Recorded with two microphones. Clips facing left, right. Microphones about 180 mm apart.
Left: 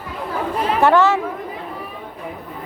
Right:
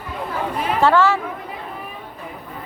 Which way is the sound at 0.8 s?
15° left (ahead or behind).